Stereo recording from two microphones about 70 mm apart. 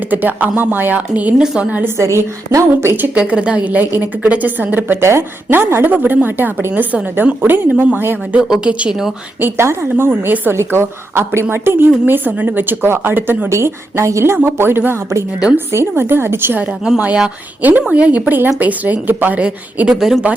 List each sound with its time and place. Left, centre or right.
0.1 s a woman's voice: right
2.0 s a woman's voice: right
3.2 s a woman's voice: centre
8.4 s a woman's voice: centre
9.4 s speech: right
10.1 s a woman's voice: right
10.5 s speech: right
13.5 s a woman's voice: right
14.3 s a woman's voice: right; by 20.0 s centre
20.0 s speech: centre